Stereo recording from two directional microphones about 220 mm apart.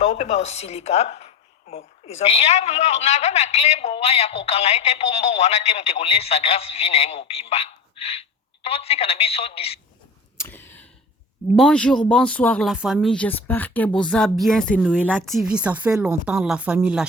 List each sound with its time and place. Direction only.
0.0 s a woman's voice: 35° left (ahead or behind)
10.3 s a sound: 10° left (ahead or behind)
11.5 s speech: 5° left (ahead or behind)